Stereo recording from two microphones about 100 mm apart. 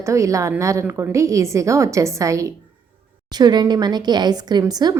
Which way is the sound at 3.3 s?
45° right (ahead or behind).